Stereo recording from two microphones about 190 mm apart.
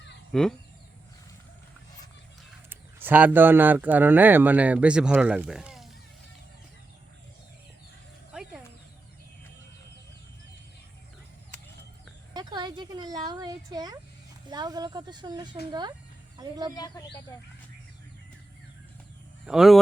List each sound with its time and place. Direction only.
0.3 s speech: centre (ahead or behind)
2.6 s speech: 10° right (ahead or behind)
8.3 s a sound: 5° right (ahead or behind)
12.3 s a sound: 20° right (ahead or behind)
14.4 s speech: 20° right (ahead or behind)
16.7 s speech: 20° left (ahead or behind)
19.5 s speech: centre (ahead or behind)